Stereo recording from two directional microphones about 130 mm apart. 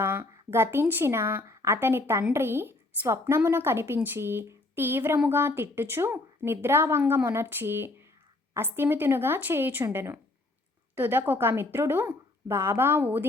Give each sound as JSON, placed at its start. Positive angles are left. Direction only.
{"t": 0.0, "sound": "a woman's voice", "side_deg": -20}